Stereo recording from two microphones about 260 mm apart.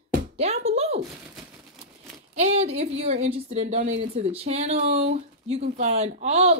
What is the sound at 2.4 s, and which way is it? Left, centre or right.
A woman's voice, right.